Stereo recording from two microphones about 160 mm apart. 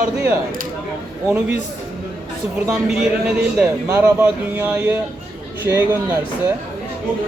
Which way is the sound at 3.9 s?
15° right (ahead or behind).